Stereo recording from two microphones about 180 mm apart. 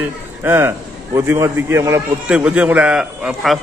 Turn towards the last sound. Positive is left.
turn(degrees=0)  # may be behind; listen again after turning